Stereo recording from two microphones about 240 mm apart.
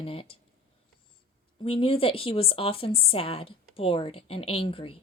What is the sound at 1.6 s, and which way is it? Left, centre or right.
A woman's voice, left.